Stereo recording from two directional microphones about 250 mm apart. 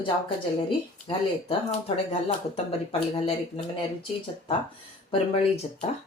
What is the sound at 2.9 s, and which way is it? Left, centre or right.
Speech, left.